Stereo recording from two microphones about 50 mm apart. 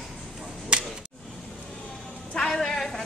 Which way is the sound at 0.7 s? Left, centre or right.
Centre.